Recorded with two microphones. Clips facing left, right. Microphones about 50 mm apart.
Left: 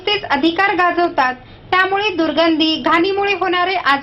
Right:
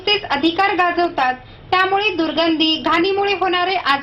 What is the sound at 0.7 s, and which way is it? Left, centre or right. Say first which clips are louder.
A woman's voice: left 2 dB; centre.